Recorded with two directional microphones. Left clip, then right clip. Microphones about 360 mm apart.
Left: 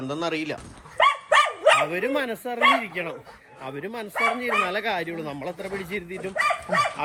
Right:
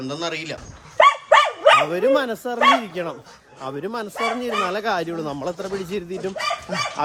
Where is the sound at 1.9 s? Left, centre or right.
Centre.